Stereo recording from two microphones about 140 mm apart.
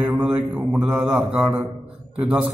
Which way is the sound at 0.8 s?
15° right (ahead or behind).